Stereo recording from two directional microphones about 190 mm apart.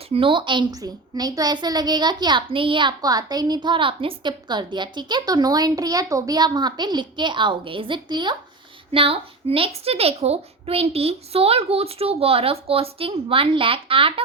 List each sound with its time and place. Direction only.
0.1 s a woman's voice: 25° right (ahead or behind)